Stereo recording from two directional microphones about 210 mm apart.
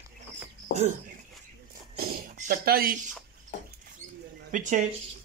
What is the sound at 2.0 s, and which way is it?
Speech, 45° right (ahead or behind).